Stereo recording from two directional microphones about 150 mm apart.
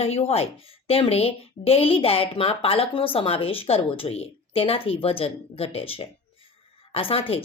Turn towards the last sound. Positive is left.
turn(degrees=40)  # may be behind; listen again after turning